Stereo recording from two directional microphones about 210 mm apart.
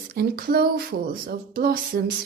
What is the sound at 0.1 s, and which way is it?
Speech, 45° right (ahead or behind).